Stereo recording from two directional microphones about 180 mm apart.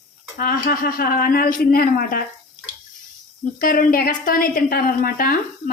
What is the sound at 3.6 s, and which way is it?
A woman's voice, 50° left (ahead or behind).